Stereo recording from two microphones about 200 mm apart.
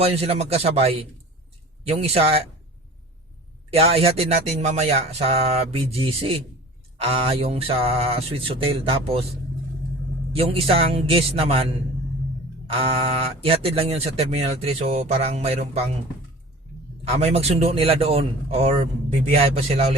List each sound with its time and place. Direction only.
0.0 s speech: 30° right (ahead or behind)
3.7 s speech: 30° right (ahead or behind)
10.3 s speech: 30° right (ahead or behind)
12.7 s speech: 30° right (ahead or behind)
17.0 s speech: 30° right (ahead or behind)